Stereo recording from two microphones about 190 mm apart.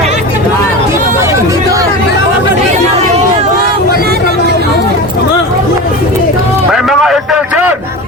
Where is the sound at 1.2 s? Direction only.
15° right (ahead or behind).